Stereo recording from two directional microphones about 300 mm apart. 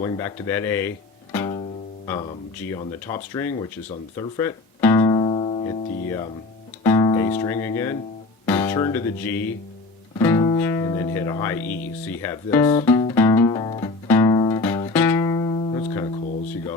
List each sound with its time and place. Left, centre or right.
0.0 s speech: centre
3.3 s speech: centre
4.2 s guitar: centre
6.8 s music: centre
8.4 s speech: centre
12.8 s music: centre